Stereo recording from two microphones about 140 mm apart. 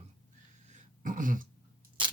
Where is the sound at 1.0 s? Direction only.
70° right (ahead or behind).